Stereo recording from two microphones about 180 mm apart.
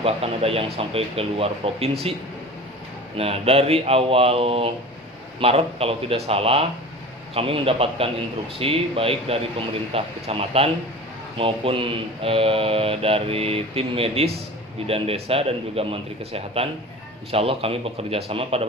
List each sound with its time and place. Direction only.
0.0 s speech: 35° right (ahead or behind)
3.2 s speech: 35° right (ahead or behind)